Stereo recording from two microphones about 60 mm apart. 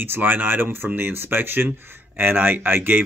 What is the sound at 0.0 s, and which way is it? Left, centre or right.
Speech, right.